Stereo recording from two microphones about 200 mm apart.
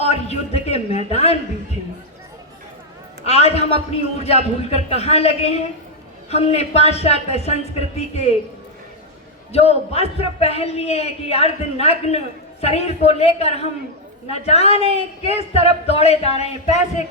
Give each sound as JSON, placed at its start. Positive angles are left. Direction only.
{"t": 0.0, "sound": "a sound", "side_deg": 30}
{"t": 3.2, "sound": "a man's voice", "side_deg": 30}
{"t": 9.5, "sound": "a man's voice", "side_deg": 30}